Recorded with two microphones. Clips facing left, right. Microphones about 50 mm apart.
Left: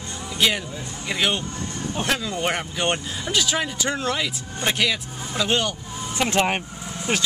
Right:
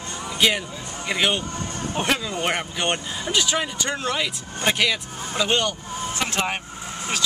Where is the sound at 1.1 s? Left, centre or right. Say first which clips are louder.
Right 1 dB; centre.